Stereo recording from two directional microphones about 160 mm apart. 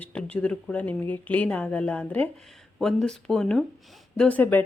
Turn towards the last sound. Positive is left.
turn(degrees=10)  # may be behind; listen again after turning